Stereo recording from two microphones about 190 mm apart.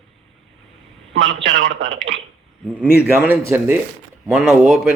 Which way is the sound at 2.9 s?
10° right (ahead or behind).